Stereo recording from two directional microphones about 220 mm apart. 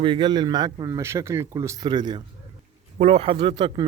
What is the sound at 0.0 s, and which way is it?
Speech, 20° right (ahead or behind).